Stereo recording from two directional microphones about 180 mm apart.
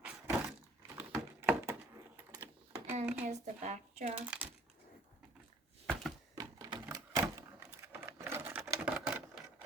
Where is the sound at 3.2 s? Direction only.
40° right (ahead or behind).